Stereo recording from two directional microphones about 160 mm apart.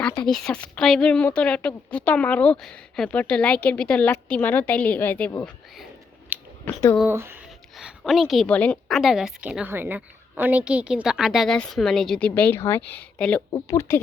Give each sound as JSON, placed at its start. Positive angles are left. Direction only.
{"t": 0.2, "sound": "a woman's voice", "side_deg": 5}
{"t": 6.3, "sound": "scissors", "side_deg": -10}
{"t": 7.1, "sound": "speech", "side_deg": -15}
{"t": 7.8, "sound": "a woman's voice", "side_deg": 0}
{"t": 13.5, "sound": "speech", "side_deg": 20}